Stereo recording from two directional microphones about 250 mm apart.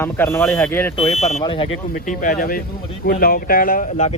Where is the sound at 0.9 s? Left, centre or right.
Left.